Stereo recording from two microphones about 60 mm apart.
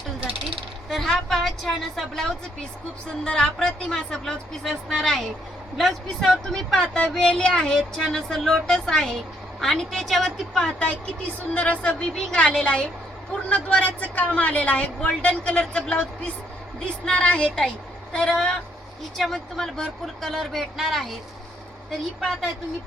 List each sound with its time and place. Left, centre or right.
0.9 s a woman's voice: centre
10.8 s a woman's voice: centre
19.1 s speech: centre